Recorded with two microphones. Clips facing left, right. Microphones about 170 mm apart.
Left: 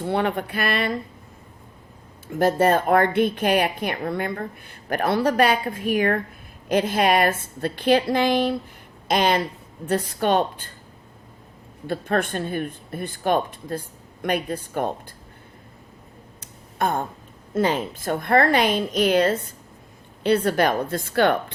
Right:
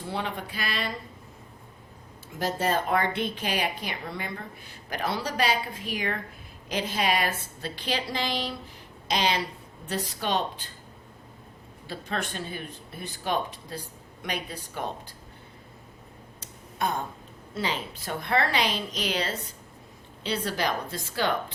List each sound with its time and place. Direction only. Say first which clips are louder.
0.0 s speech: left 9 dB; 60° left (ahead or behind)
2.2 s speech: left 9 dB; 55° left (ahead or behind)
11.9 s speech: left 9 dB; 55° left (ahead or behind)
16.4 s a sound: left 5 dB; 55° left (ahead or behind)
17.5 s speech: left 9 dB; 50° left (ahead or behind)